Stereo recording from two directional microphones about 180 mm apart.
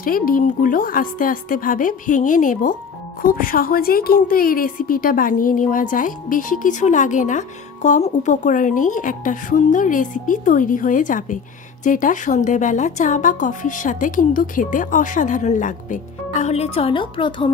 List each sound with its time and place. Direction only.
0.0 s a woman's voice: 50° left (ahead or behind); by 17.5 s 25° left (ahead or behind)